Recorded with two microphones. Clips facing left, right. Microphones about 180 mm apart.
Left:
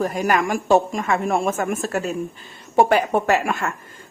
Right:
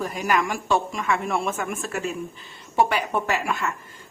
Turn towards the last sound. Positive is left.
turn(degrees=50)  # may be behind; listen again after turning